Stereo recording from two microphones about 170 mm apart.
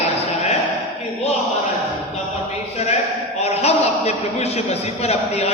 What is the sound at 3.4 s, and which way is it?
A man's voice, 40° left (ahead or behind).